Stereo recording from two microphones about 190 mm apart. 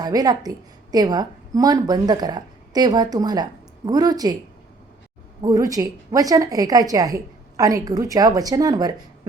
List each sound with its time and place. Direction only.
0.0 s a woman's voice: 20° right (ahead or behind)
5.4 s a woman's voice: 20° right (ahead or behind)